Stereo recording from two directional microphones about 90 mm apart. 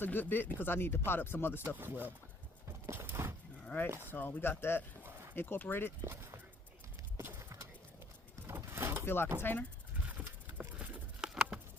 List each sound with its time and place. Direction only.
0.0 s speech: 20° left (ahead or behind)
1.6 s speech: 20° right (ahead or behind)
2.8 s horse: 25° right (ahead or behind)
4.1 s speech: 25° left (ahead or behind)
6.0 s speech: 30° right (ahead or behind)
7.2 s clip-clop: 30° right (ahead or behind)
8.4 s a sound: 30° right (ahead or behind)
9.0 s speech: 25° left (ahead or behind)
10.0 s a sound: 15° right (ahead or behind)
10.8 s patter: 5° right (ahead or behind)